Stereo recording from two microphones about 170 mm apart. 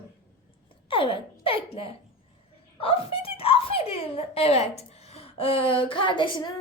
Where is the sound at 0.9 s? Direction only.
30° left (ahead or behind).